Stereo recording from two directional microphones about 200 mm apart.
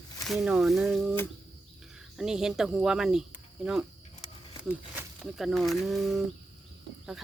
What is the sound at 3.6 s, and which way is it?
Cricket, 5° right (ahead or behind).